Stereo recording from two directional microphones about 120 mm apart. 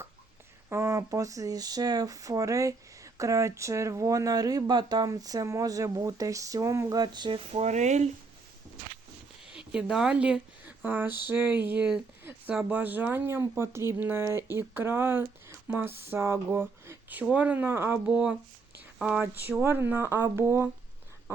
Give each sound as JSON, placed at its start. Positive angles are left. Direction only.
{"t": 0.7, "sound": "speech", "side_deg": -25}
{"t": 7.5, "sound": "speech", "side_deg": -75}
{"t": 9.5, "sound": "speech", "side_deg": -5}
{"t": 18.0, "sound": "speech", "side_deg": -10}
{"t": 18.9, "sound": "a sound", "side_deg": -5}
{"t": 19.2, "sound": "speech", "side_deg": -15}